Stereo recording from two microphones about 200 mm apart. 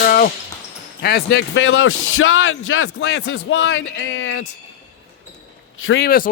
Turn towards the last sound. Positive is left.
turn(degrees=50)  # may be behind; listen again after turning